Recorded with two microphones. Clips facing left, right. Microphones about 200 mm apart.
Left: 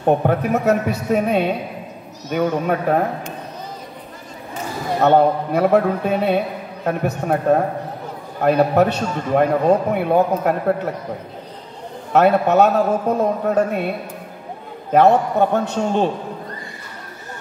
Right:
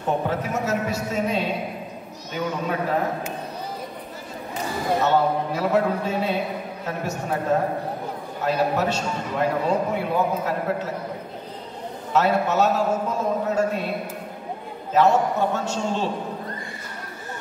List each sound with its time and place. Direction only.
0.0 s a man's voice: 60° left (ahead or behind)
5.0 s a man's voice: 60° left (ahead or behind)
12.1 s a man's voice: 60° left (ahead or behind)
14.9 s a man's voice: 60° left (ahead or behind)